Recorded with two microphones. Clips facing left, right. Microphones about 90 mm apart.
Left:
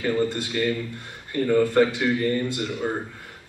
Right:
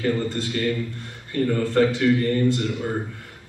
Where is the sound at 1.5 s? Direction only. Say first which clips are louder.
Left 2 dB; 15° left (ahead or behind).